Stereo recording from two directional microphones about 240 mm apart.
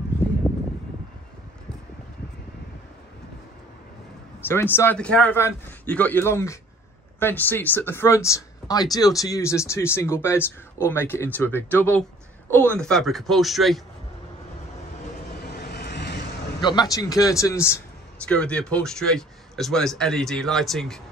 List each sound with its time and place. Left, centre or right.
4.5 s speech: centre
15.4 s vehicle: left
16.9 s a man's voice: centre